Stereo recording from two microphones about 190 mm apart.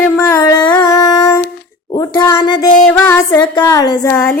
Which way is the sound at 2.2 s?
20° left (ahead or behind).